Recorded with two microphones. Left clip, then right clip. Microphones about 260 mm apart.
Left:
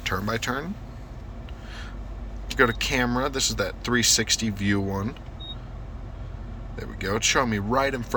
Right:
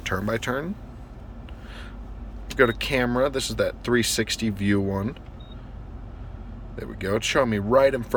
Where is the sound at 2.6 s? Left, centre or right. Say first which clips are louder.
Right 1 dB; centre.